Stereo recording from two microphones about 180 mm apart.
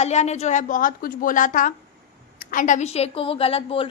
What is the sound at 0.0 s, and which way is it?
A woman's voice, 40° left (ahead or behind).